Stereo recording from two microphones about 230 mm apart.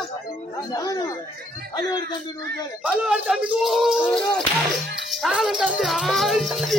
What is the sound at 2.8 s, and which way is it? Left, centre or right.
Speech, centre.